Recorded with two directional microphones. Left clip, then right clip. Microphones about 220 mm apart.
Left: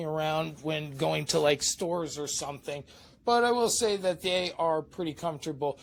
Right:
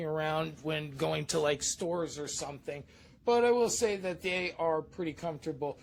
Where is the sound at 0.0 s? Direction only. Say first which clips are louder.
Left 3 dB; 20° left (ahead or behind).